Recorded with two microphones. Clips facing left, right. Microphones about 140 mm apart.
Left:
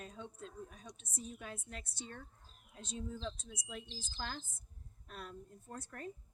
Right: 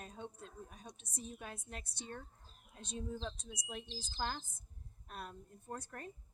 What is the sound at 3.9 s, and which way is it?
Speech, 35° right (ahead or behind).